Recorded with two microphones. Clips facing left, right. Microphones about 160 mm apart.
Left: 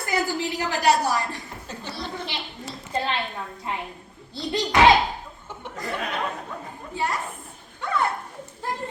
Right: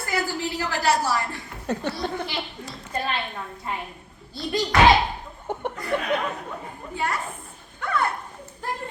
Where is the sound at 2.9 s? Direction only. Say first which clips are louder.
Left 2 dB; 25° left (ahead or behind).